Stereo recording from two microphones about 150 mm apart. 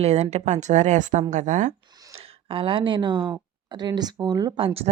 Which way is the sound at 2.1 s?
40° right (ahead or behind).